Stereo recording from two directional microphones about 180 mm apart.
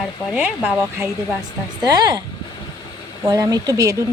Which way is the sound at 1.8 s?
20° right (ahead or behind).